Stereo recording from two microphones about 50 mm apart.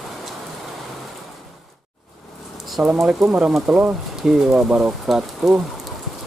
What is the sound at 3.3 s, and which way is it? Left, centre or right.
Speech, right.